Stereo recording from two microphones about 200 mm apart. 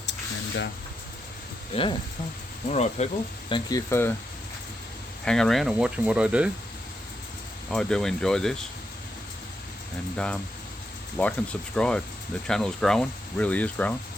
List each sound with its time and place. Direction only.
0.0 s a sound: 60° left (ahead or behind)
1.7 s speech: 25° left (ahead or behind)
3.5 s speech: 15° left (ahead or behind)
5.2 s speech: 5° left (ahead or behind)
7.7 s speech: 5° left (ahead or behind)
11.2 s speech: 5° left (ahead or behind)